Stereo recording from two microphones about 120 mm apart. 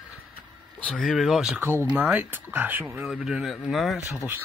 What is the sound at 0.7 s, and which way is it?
Speech, 10° left (ahead or behind).